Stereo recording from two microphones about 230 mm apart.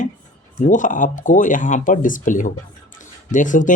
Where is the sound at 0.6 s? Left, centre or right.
Left.